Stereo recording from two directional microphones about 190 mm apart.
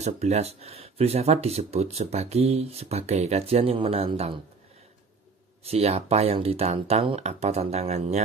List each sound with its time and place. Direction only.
0.0 s speech: 35° right (ahead or behind)
5.6 s speech: 30° right (ahead or behind)